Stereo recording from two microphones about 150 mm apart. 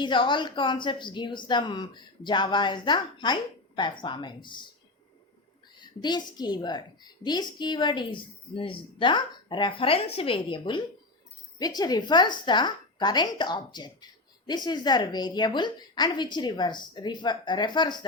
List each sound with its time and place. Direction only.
0.0 s a woman's voice: 30° left (ahead or behind)
5.8 s a woman's voice: 30° left (ahead or behind)